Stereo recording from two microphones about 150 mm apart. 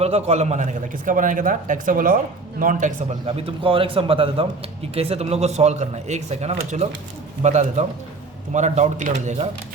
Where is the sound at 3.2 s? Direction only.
40° right (ahead or behind).